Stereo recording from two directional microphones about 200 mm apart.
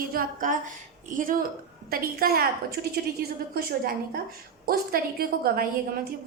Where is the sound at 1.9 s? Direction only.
50° right (ahead or behind).